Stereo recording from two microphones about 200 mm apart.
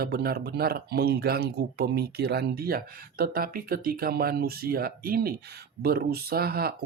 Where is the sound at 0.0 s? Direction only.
50° right (ahead or behind).